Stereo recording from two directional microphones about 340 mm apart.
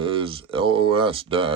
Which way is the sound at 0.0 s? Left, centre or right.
Centre.